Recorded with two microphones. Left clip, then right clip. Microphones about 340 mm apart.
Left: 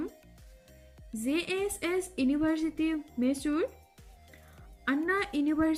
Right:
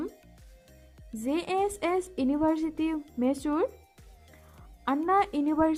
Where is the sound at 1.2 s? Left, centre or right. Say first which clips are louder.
Right 3 dB; centre.